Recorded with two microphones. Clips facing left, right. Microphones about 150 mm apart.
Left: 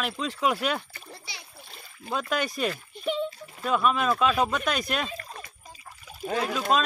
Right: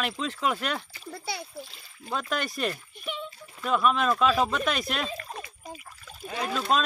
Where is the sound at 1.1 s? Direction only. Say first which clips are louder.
Right 13 dB; 55° right (ahead or behind).